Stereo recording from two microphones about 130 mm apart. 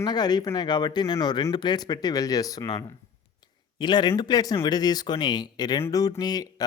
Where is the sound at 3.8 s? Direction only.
35° left (ahead or behind).